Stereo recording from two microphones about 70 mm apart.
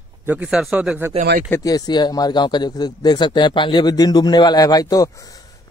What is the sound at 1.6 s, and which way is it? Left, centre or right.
Speech, left.